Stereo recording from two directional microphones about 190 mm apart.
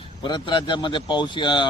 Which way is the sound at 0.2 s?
25° left (ahead or behind).